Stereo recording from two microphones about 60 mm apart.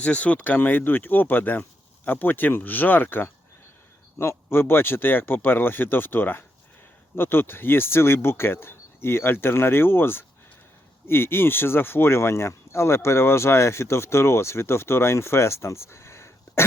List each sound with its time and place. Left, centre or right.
0.0 s speech: left